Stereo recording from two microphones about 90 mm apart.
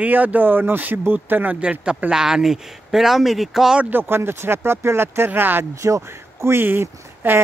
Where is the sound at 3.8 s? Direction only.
25° right (ahead or behind).